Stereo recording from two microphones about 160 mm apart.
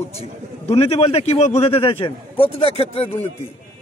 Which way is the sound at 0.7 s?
40° left (ahead or behind).